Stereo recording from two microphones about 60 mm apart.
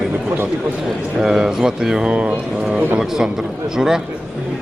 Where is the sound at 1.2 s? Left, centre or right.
Centre.